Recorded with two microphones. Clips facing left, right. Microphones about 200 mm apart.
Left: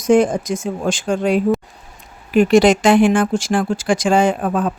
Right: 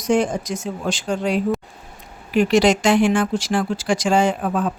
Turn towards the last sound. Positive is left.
turn(degrees=55)  # may be behind; listen again after turning